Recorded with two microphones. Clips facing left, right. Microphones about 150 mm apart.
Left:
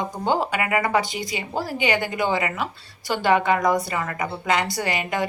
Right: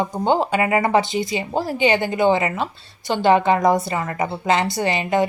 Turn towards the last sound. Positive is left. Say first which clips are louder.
# right 5 dB
turn(degrees=-25)  # may be behind; listen again after turning